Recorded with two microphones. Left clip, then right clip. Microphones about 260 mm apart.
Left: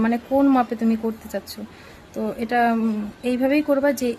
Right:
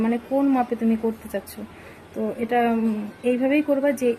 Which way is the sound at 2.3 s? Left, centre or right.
Centre.